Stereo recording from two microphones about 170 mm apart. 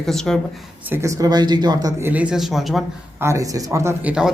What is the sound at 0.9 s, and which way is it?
Speech, 15° right (ahead or behind).